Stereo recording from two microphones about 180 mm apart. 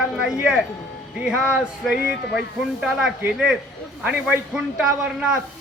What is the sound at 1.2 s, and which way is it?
Speech, 5° right (ahead or behind).